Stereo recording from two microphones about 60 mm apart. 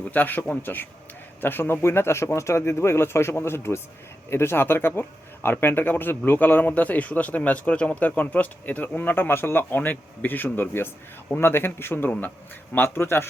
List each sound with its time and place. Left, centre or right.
0.1 s speech: left